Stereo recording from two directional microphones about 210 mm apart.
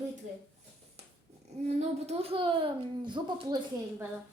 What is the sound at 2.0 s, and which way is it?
Speech, 25° right (ahead or behind).